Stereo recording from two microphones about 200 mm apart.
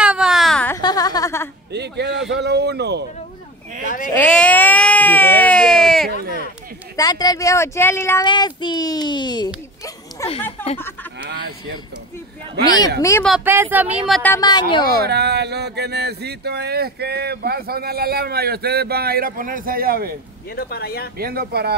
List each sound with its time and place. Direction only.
0.0 s baby cry: 5° right (ahead or behind)
0.7 s a sound: 20° left (ahead or behind)
1.7 s a man's voice: 55° right (ahead or behind)
4.1 s baby cry: 5° left (ahead or behind)
6.0 s a sound: 50° right (ahead or behind)
7.0 s speech: 20° left (ahead or behind)
10.2 s a sound: 15° left (ahead or behind)
11.1 s fowl: 55° right (ahead or behind)
12.6 s speech: 20° left (ahead or behind)
13.4 s speech: 10° right (ahead or behind)
14.3 s speech: 20° left (ahead or behind)
15.0 s speech: 55° right (ahead or behind)
20.5 s speech: 50° left (ahead or behind)
21.2 s speech: 50° right (ahead or behind)